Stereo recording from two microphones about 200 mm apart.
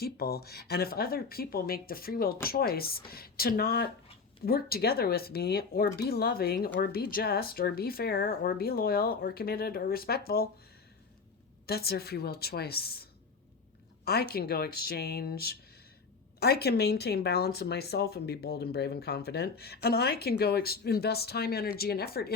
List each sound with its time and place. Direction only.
0.0 s speech: 50° left (ahead or behind)
11.6 s speech: 50° left (ahead or behind)